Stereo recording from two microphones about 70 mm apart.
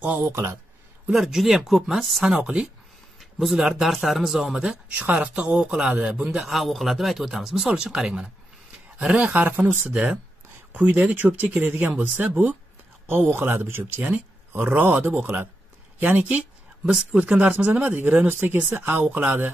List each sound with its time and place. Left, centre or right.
0.0 s speech: right
0.3 s speech: right
1.1 s speech: centre
2.4 s a man's voice: centre
3.2 s a sound: centre
3.6 s a man's voice: centre
4.9 s a man's voice: right